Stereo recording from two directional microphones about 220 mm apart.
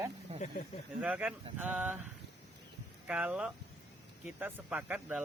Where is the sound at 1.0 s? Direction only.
5° right (ahead or behind).